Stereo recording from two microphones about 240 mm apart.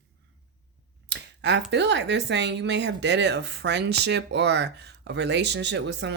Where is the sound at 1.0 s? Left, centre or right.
Right.